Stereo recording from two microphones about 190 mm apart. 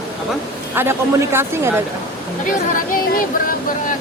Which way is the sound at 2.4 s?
45° left (ahead or behind).